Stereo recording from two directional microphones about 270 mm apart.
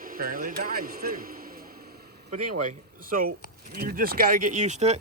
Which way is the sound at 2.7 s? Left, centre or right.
Right.